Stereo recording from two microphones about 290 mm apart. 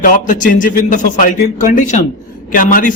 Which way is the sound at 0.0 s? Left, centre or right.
Left.